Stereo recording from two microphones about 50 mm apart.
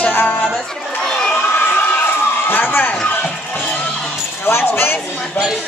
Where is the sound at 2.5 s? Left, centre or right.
Left.